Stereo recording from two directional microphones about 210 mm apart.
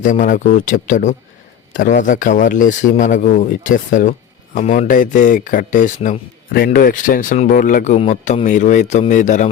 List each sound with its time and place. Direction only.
0.0 s speech: 40° left (ahead or behind)